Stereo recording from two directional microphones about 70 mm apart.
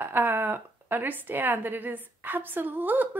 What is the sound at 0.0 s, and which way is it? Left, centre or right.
A woman's voice, right.